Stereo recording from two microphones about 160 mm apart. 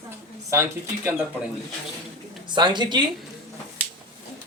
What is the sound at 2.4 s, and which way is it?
Speech, 30° right (ahead or behind).